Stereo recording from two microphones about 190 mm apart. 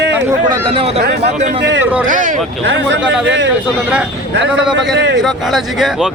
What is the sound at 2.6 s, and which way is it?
Speech, 70° right (ahead or behind).